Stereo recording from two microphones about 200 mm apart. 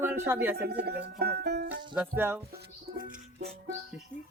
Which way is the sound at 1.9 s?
10° right (ahead or behind).